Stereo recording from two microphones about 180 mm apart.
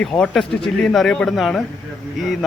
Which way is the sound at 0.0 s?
5° left (ahead or behind).